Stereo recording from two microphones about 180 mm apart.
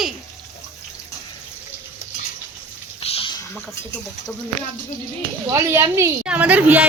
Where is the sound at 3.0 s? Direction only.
35° left (ahead or behind).